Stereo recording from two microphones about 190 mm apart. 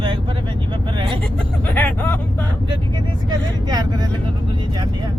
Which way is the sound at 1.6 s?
10° left (ahead or behind).